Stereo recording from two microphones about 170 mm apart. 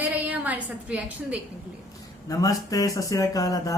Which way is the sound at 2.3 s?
20° left (ahead or behind).